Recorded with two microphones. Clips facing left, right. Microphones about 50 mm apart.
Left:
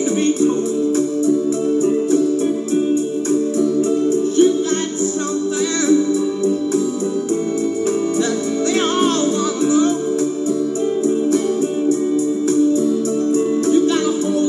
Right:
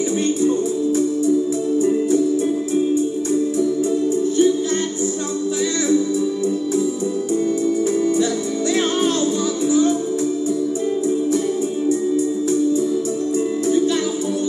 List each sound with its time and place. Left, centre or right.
4.1 s music: left